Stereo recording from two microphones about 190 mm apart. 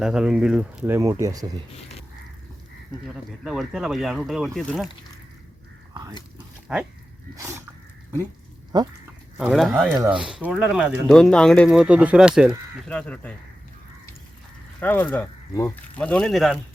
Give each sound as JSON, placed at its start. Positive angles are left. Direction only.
{"t": 0.0, "sound": "speech", "side_deg": -5}
{"t": 0.9, "sound": "speech", "side_deg": -15}
{"t": 3.4, "sound": "speech", "side_deg": 0}
{"t": 5.9, "sound": "speech", "side_deg": -20}
{"t": 6.7, "sound": "speech", "side_deg": 0}
{"t": 7.3, "sound": "speech", "side_deg": -15}
{"t": 8.7, "sound": "speech", "side_deg": -20}
{"t": 9.4, "sound": "speech", "side_deg": -5}
{"t": 12.9, "sound": "speech", "side_deg": 5}
{"t": 14.8, "sound": "speech", "side_deg": 10}